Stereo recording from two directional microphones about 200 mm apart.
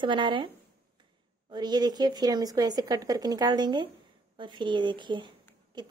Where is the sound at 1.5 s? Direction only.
20° right (ahead or behind).